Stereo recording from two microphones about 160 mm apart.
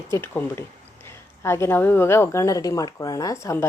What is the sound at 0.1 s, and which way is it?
A woman's voice, 15° left (ahead or behind).